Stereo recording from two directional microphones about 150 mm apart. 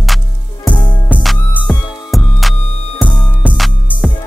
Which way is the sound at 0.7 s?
35° left (ahead or behind).